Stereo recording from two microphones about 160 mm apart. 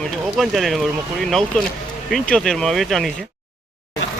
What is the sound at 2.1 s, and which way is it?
Speech, 5° left (ahead or behind).